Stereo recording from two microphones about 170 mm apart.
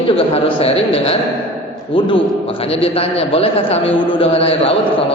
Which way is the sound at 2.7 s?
35° left (ahead or behind).